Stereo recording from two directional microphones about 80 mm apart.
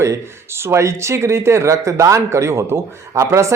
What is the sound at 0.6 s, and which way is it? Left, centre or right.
Speech, right.